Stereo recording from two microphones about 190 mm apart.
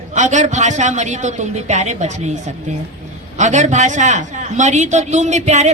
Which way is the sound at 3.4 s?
40° right (ahead or behind).